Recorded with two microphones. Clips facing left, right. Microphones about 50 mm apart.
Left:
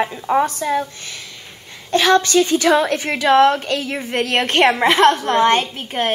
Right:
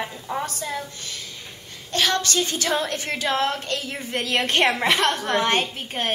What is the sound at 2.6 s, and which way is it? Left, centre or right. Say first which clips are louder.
A woman's voice: left 9 dB; left.